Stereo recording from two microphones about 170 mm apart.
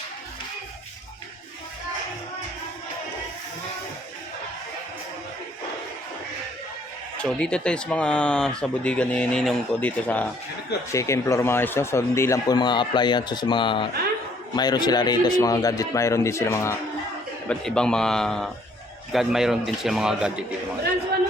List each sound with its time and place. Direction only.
7.2 s speech: 5° left (ahead or behind)
17.5 s speech: 5° left (ahead or behind)